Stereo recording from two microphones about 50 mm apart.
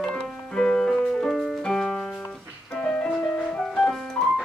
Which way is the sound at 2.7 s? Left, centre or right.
Left.